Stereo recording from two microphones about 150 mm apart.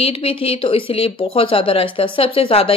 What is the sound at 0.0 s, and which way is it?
Speech, 40° left (ahead or behind).